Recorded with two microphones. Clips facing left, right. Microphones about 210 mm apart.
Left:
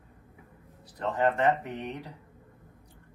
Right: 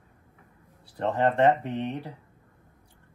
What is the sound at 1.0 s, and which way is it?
Speech, 30° right (ahead or behind).